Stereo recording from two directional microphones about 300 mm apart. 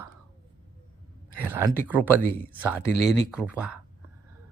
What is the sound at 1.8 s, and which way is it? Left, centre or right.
Speech, centre.